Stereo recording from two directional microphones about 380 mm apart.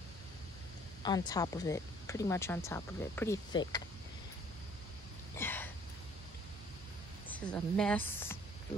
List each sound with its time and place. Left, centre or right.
1.0 s speech: centre
5.3 s a sound: centre
7.2 s speech: centre